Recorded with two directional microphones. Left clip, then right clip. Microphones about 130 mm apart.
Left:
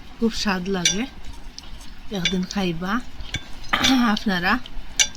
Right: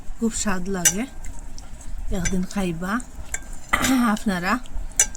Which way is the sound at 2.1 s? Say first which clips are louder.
Left 3 dB; centre (ahead or behind).